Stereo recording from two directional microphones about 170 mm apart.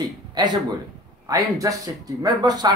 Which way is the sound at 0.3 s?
25° right (ahead or behind).